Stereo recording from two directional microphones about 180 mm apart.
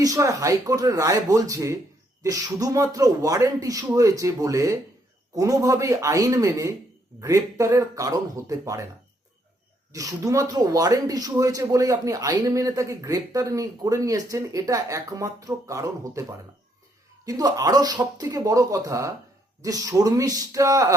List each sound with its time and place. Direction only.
0.0 s speech: 20° right (ahead or behind)
9.9 s speech: 20° right (ahead or behind)
17.2 s speech: 20° right (ahead or behind)